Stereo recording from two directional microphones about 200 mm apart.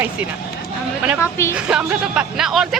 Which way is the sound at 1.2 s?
15° left (ahead or behind).